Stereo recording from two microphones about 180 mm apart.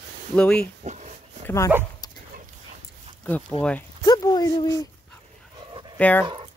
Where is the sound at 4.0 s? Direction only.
20° left (ahead or behind).